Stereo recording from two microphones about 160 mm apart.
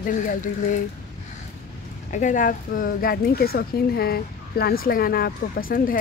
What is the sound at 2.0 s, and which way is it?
A woman's voice, 50° left (ahead or behind).